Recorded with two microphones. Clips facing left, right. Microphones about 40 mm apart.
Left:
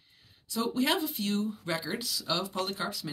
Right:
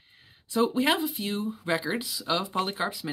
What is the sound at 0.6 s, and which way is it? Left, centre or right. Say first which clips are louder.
Speech: right 4 dB; centre.